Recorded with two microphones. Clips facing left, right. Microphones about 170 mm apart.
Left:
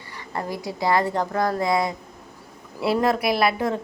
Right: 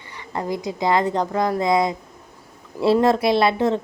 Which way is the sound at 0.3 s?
20° right (ahead or behind).